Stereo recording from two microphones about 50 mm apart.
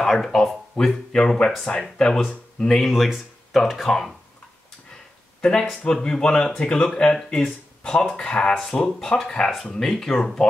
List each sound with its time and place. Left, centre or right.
0.0 s speech: centre
2.8 s speech: centre
5.4 s speech: centre